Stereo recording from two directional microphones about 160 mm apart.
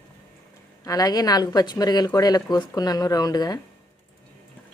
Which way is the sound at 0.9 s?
25° left (ahead or behind).